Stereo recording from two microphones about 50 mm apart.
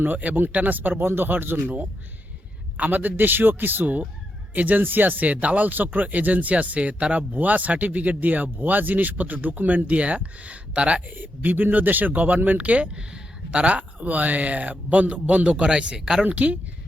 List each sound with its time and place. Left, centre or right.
0.0 s speech: right
0.9 s speech: right
11.2 s speech: right; by 16.2 s centre
16.2 s speech: right